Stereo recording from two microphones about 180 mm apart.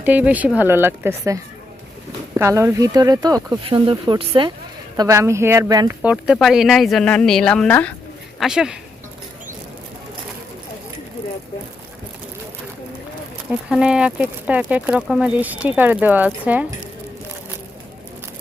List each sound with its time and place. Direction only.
0.0 s speech: 10° right (ahead or behind)
2.4 s speech: 15° right (ahead or behind)
6.0 s speech: 5° right (ahead or behind)
8.4 s speech: 5° right (ahead or behind)
13.5 s speech: 5° right (ahead or behind)